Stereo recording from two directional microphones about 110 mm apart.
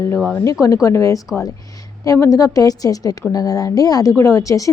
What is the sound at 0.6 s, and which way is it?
A woman's voice, 30° left (ahead or behind).